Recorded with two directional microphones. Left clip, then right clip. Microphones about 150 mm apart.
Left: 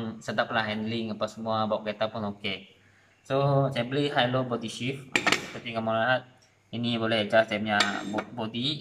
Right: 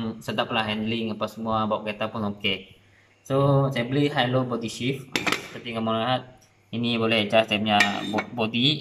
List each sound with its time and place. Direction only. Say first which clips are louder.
0.2 s speech: right 1 dB; 15° right (ahead or behind)
5.1 s a sound: left 2 dB; 10° left (ahead or behind)
5.7 s speech: even; 15° right (ahead or behind)
6.9 s cutlery: right 3 dB; 20° right (ahead or behind)